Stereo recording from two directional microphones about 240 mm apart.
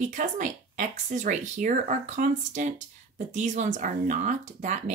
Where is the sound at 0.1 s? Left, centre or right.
Right.